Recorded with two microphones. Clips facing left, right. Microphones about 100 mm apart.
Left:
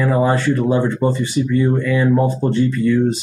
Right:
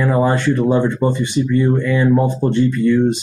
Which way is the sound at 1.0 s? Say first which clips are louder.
Right 1 dB; 15° right (ahead or behind).